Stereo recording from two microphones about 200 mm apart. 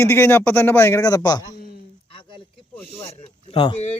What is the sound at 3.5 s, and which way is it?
Speech, 30° left (ahead or behind).